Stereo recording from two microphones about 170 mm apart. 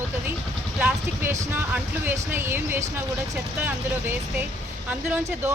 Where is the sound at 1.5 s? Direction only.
10° right (ahead or behind).